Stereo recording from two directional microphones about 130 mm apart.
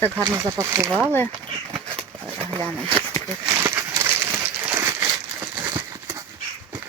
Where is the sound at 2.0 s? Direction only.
35° right (ahead or behind).